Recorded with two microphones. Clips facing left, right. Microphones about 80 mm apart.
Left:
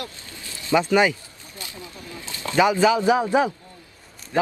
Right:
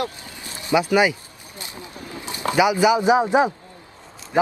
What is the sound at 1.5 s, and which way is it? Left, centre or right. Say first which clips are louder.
Speech: right 2 dB; right.